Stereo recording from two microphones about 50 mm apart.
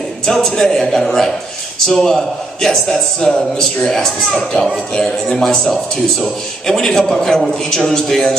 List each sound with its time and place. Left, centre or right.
0.2 s a man's voice: centre